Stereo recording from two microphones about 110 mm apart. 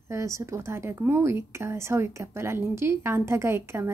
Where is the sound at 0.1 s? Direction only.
25° right (ahead or behind).